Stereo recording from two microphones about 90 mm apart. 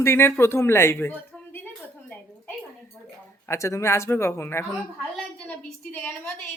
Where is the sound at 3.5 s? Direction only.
30° left (ahead or behind).